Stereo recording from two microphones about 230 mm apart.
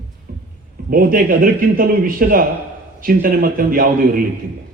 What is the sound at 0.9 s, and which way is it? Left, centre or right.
A man's voice, right.